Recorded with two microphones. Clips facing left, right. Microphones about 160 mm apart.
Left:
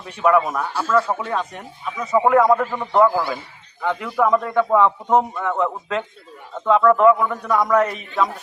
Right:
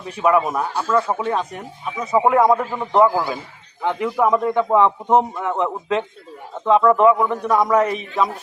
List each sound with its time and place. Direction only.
0.2 s a man's voice: 15° right (ahead or behind)
6.8 s a man's voice: 15° right (ahead or behind)